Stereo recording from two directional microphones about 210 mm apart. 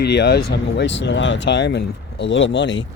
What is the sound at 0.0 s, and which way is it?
Speech, 50° left (ahead or behind).